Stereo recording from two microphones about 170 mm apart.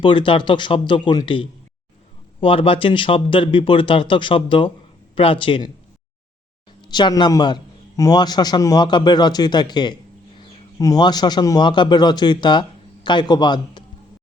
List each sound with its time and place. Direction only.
0.0 s a man's voice: 30° left (ahead or behind)
6.8 s a man's voice: 25° left (ahead or behind)